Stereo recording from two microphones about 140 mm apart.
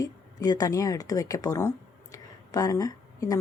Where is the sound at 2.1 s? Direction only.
25° left (ahead or behind).